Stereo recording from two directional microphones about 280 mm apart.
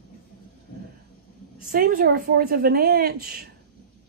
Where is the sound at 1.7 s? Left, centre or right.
Right.